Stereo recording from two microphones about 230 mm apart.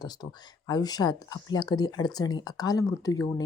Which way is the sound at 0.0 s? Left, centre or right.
Centre.